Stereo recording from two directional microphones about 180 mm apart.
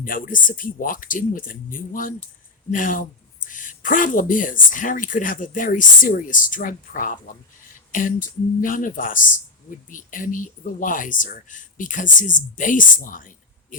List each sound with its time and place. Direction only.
0.0 s speech: 50° left (ahead or behind)